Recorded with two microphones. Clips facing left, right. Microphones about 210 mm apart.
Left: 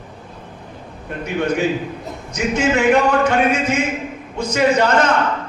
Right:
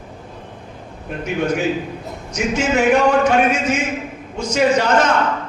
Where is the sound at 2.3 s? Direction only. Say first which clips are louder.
Even; 60° left (ahead or behind).